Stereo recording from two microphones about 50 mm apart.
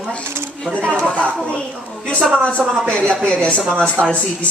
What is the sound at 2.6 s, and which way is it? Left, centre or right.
Speech, centre.